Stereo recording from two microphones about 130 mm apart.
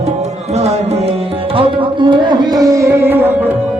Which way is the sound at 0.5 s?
55° right (ahead or behind).